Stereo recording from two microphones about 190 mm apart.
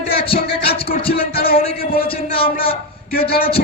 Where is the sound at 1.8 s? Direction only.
50° left (ahead or behind).